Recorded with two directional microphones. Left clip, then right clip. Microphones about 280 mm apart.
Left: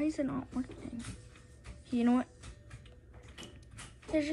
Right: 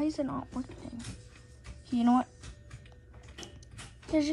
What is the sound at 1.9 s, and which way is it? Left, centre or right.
Speech, centre.